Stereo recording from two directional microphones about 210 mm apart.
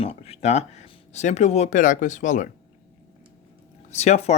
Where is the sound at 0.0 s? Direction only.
30° left (ahead or behind).